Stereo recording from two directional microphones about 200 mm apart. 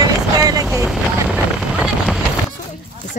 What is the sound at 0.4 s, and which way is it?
Vehicle, 20° right (ahead or behind).